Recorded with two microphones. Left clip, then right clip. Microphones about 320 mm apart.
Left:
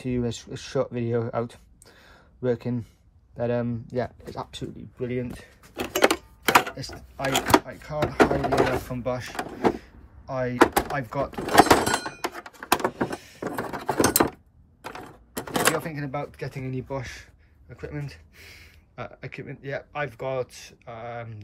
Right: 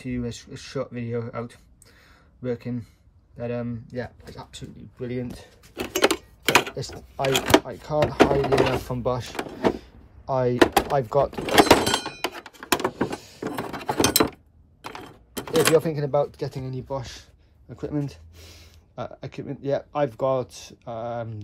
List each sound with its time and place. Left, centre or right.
0.0 s speech: centre
4.9 s typewriter: centre
7.2 s speech: centre
10.2 s speech: right
10.5 s speech: centre
11.3 s vehicle: centre
13.4 s a sound: centre
16.6 s speech: centre